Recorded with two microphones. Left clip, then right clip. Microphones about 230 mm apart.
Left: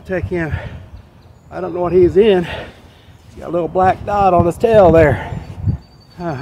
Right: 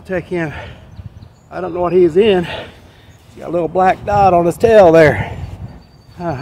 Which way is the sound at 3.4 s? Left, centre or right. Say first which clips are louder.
Right 1 dB; centre.